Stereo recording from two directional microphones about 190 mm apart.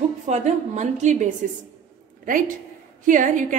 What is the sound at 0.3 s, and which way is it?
A woman's voice, 40° right (ahead or behind).